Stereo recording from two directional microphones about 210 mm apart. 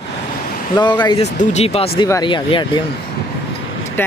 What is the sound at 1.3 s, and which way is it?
Speech, 35° left (ahead or behind).